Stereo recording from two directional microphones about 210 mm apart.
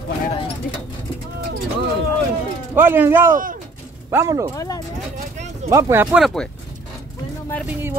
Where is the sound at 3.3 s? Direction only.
40° right (ahead or behind).